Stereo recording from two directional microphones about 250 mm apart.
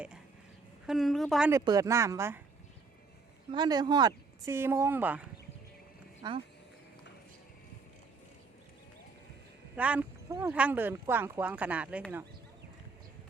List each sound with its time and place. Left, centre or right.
0.9 s speech: centre
3.5 s speech: centre
9.7 s speech: centre